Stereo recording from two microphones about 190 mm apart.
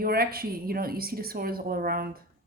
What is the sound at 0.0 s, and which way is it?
A woman's voice, 50° right (ahead or behind).